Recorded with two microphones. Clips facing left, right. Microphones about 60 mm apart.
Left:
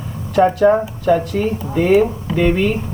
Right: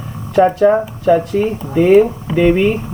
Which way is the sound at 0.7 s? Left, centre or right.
Centre.